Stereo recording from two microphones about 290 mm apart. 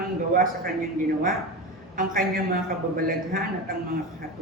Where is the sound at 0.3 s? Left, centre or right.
Right.